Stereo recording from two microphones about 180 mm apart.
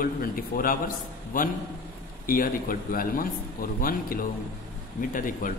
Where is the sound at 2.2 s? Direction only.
50° left (ahead or behind).